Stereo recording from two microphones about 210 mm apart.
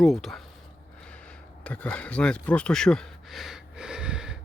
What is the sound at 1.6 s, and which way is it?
Speech, 5° left (ahead or behind).